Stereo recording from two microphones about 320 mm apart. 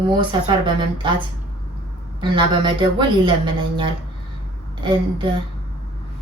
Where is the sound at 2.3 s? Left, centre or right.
Centre.